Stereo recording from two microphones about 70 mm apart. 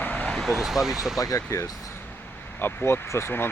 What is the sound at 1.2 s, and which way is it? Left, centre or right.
Speech, left.